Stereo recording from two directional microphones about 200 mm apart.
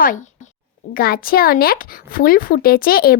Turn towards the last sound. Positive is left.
turn(degrees=50)  # may be behind; listen again after turning